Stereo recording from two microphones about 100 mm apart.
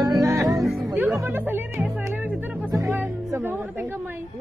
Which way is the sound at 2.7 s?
30° right (ahead or behind).